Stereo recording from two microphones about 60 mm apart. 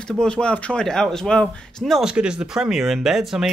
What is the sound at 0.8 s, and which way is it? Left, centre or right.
Speech, centre.